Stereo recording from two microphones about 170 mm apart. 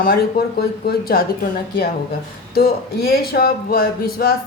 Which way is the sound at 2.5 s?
65° left (ahead or behind).